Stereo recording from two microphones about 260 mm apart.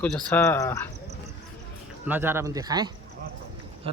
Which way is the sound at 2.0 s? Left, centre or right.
Centre.